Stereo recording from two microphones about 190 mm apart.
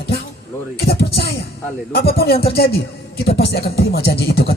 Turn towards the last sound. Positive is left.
turn(degrees=55)  # may be behind; listen again after turning